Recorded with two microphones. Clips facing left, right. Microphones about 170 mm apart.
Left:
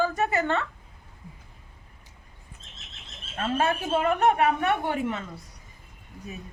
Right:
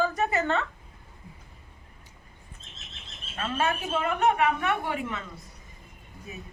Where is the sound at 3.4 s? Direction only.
35° left (ahead or behind).